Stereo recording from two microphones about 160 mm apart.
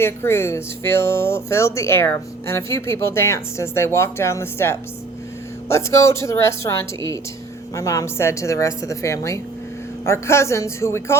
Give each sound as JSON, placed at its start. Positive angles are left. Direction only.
{"t": 0.0, "sound": "a woman's voice", "side_deg": 15}